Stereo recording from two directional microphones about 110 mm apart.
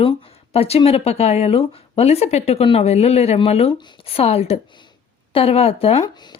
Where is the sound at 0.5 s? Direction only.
65° left (ahead or behind).